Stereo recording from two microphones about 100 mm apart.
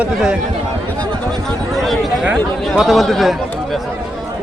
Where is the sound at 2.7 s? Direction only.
Centre (ahead or behind).